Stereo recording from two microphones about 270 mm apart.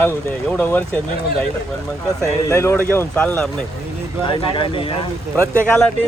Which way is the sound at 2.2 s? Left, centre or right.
Centre.